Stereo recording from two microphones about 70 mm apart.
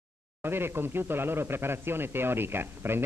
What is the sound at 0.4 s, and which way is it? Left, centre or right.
Speech, right.